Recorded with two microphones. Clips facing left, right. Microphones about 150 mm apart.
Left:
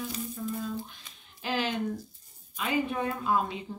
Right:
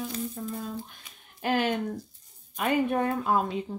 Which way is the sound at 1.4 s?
55° right (ahead or behind).